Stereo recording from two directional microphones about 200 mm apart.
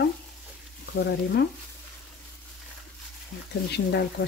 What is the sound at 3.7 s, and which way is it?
Frying, 55° left (ahead or behind).